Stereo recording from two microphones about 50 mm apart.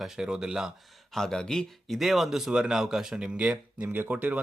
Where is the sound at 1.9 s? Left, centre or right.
Centre.